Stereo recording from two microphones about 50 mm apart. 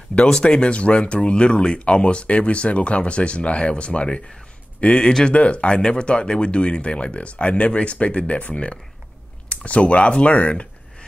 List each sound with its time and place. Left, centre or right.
0.1 s speech: centre